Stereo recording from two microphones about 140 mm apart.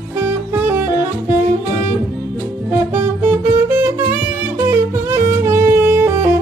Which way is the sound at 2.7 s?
15° right (ahead or behind).